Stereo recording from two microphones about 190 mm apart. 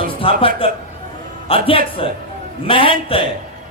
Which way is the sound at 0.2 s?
30° left (ahead or behind).